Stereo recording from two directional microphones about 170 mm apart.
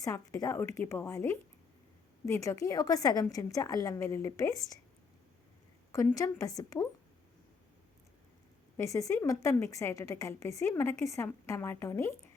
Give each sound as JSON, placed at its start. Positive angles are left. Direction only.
{"t": 0.0, "sound": "a woman's voice", "side_deg": 20}
{"t": 5.9, "sound": "a woman's voice", "side_deg": 20}
{"t": 8.8, "sound": "a woman's voice", "side_deg": 20}